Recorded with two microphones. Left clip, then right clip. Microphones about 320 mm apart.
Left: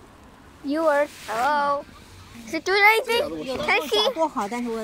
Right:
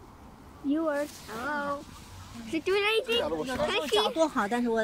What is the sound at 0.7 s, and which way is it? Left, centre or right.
Speech, left.